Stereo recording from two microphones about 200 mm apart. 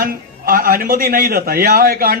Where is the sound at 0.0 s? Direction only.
45° right (ahead or behind).